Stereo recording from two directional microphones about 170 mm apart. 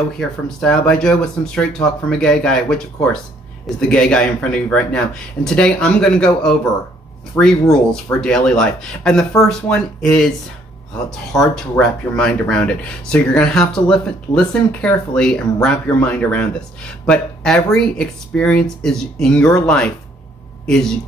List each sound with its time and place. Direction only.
0.6 s speech: 5° left (ahead or behind)